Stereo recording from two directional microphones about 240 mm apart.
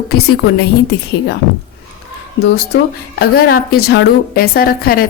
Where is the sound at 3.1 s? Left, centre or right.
Left.